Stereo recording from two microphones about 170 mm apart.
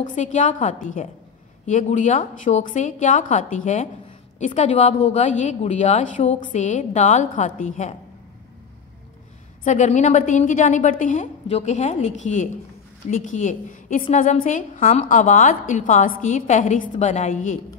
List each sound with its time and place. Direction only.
0.0 s a woman's voice: 45° left (ahead or behind)
9.7 s a woman's voice: 45° left (ahead or behind)